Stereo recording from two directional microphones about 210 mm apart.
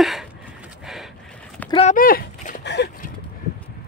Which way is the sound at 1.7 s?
35° left (ahead or behind).